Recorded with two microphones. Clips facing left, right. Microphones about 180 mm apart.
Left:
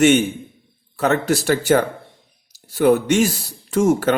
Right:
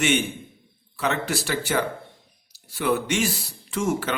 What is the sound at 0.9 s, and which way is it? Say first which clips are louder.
Speech: left 7 dB; 45° left (ahead or behind).